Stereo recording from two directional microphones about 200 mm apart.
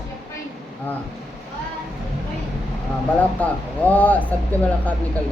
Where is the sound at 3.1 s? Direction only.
10° left (ahead or behind).